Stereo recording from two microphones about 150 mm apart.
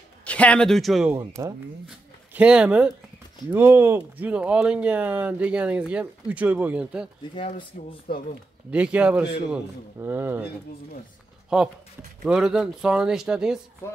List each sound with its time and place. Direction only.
0.2 s a man's voice: 10° left (ahead or behind)
1.1 s speech: 20° right (ahead or behind)
2.3 s speech: 10° right (ahead or behind)
7.3 s speech: 35° left (ahead or behind)
8.1 s speech: 90° left
8.6 s speech: 10° right (ahead or behind)
11.5 s speech: 5° right (ahead or behind)